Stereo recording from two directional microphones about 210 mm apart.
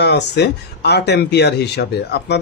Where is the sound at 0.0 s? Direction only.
50° left (ahead or behind).